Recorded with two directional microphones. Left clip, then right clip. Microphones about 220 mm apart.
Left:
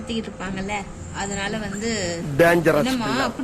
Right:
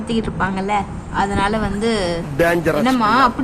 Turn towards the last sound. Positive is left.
turn(degrees=0)  # may be behind; listen again after turning